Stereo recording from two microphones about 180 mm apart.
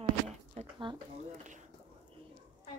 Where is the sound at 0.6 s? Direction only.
35° right (ahead or behind).